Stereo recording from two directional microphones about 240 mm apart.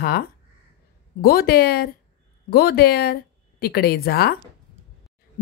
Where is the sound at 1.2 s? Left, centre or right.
Left.